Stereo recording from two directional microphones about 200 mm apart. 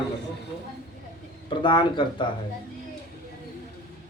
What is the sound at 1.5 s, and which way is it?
Speech, 25° left (ahead or behind).